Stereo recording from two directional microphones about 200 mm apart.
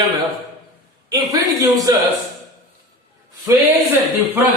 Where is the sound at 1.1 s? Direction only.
20° right (ahead or behind).